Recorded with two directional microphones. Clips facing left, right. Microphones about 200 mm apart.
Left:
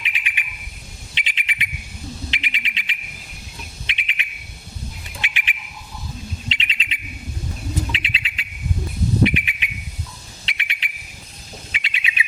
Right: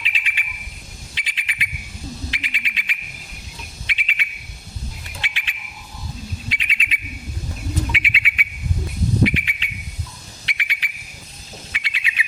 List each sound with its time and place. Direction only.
0.0 s bird: 20° left (ahead or behind)
9.2 s whistle: 20° left (ahead or behind)
11.7 s bird: 20° left (ahead or behind)